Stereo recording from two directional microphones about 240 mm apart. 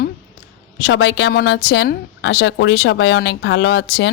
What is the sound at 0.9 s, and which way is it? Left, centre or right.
A woman's voice, left.